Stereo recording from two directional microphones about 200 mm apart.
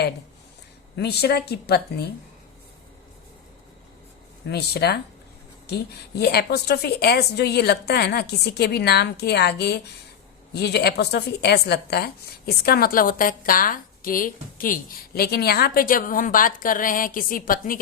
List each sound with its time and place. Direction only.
0.9 s a woman's voice: 55° left (ahead or behind)
4.4 s a woman's voice: 55° left (ahead or behind)
6.1 s a woman's voice: 55° left (ahead or behind)